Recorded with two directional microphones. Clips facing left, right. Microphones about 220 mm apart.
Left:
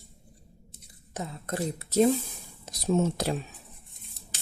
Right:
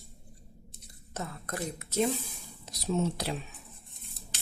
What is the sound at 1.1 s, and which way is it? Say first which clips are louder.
Speech: left 4 dB; 20° left (ahead or behind).